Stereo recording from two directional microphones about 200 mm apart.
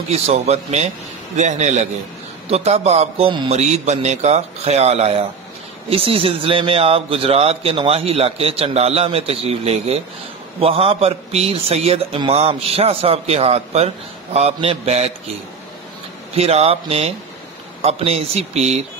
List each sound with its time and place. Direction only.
0.1 s a man's voice: 30° right (ahead or behind)
16.3 s a man's voice: 30° right (ahead or behind)